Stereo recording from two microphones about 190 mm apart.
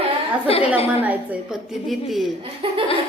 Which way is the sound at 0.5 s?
30° left (ahead or behind).